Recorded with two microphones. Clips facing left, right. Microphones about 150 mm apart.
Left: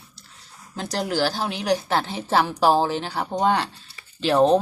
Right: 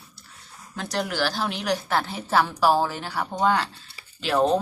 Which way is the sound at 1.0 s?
25° left (ahead or behind).